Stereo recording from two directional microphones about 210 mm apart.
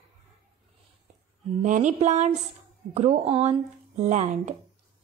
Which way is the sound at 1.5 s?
35° right (ahead or behind).